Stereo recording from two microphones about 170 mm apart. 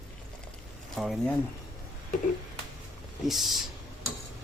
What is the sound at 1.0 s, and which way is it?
Speech, centre (ahead or behind).